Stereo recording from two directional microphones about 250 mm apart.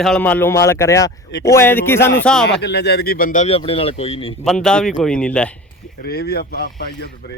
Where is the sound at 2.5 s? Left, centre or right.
Left.